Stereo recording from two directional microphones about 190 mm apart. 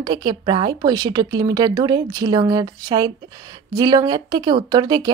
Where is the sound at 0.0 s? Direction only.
25° right (ahead or behind).